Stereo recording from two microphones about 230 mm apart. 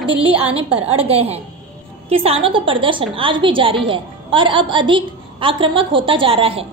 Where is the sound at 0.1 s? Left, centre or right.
Right.